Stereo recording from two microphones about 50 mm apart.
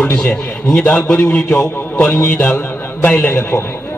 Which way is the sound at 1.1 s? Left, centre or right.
Left.